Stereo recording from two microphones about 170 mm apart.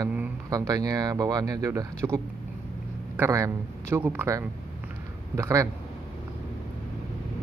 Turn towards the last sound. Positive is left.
turn(degrees=-20)  # may be behind; listen again after turning